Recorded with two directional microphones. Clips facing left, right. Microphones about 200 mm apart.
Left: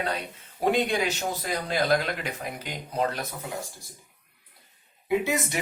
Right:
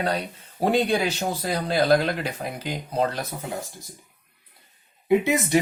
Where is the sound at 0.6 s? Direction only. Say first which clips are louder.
Right 3 dB; 35° right (ahead or behind).